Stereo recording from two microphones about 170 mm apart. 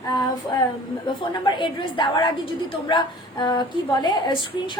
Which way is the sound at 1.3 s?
30° left (ahead or behind).